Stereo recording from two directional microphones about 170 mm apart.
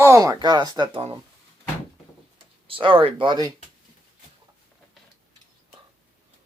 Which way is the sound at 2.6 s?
30° right (ahead or behind).